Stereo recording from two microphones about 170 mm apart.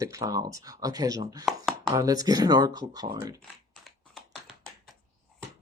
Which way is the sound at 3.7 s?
Centre (ahead or behind).